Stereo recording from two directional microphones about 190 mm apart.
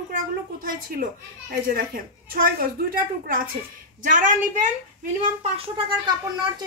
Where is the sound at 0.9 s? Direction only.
50° right (ahead or behind).